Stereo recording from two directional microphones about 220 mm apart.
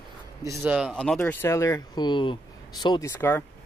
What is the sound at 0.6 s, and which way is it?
Speech, 5° right (ahead or behind).